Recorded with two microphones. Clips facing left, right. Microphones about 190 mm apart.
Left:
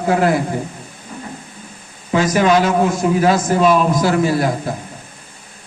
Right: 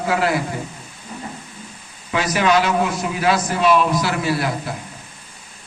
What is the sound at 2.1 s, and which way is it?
A man's voice, 45° left (ahead or behind).